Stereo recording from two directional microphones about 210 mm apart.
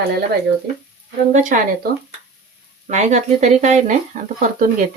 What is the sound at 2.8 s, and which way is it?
Speech, 35° right (ahead or behind).